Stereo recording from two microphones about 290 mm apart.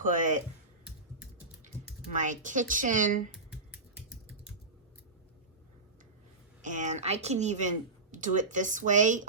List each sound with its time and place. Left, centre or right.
0.0 s music: right
2.0 s speech: right
3.5 s typing: centre
6.6 s speech: right